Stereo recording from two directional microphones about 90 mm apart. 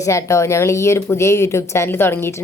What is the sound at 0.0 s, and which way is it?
A woman's voice, 35° left (ahead or behind).